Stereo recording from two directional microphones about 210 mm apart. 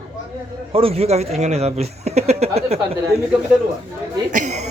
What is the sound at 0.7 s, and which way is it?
A man's voice, 25° right (ahead or behind).